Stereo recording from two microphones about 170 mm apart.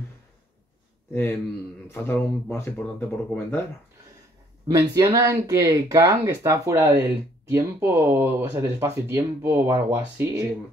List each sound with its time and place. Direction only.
1.9 s speech: 10° left (ahead or behind)
4.6 s speech: 20° right (ahead or behind)